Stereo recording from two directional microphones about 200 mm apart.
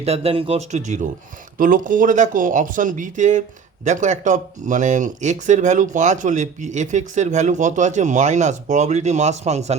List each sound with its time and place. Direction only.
0.0 s speech: 30° right (ahead or behind)